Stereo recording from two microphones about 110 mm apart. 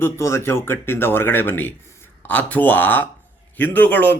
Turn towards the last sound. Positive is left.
turn(degrees=15)  # may be behind; listen again after turning